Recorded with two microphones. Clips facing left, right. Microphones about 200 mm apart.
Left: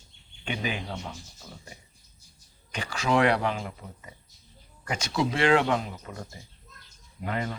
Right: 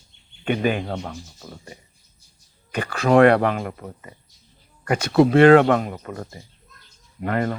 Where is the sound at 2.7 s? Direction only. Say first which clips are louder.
Right 9 dB; 55° right (ahead or behind).